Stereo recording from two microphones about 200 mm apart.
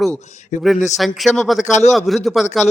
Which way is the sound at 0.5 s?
35° left (ahead or behind).